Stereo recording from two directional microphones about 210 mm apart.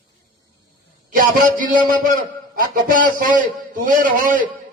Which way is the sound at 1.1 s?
40° right (ahead or behind).